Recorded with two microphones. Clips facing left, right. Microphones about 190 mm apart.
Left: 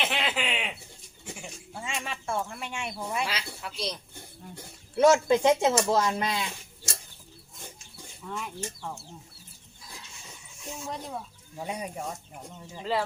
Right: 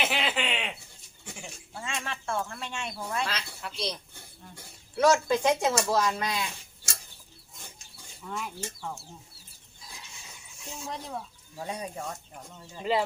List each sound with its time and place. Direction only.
0.0 s a sound: centre (ahead or behind)
3.0 s speech: 10° left (ahead or behind)
4.9 s speech: 20° left (ahead or behind)
8.2 s speech: centre (ahead or behind)
10.8 s speech: 5° left (ahead or behind)
11.5 s speech: 15° left (ahead or behind)